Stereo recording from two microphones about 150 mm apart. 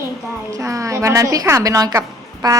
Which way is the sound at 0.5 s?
20° right (ahead or behind).